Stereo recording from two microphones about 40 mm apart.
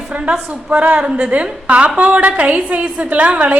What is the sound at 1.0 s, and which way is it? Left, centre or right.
A woman's voice, right.